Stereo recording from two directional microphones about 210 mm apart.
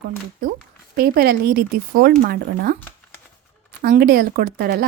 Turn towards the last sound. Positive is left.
turn(degrees=-45)  # may be behind; listen again after turning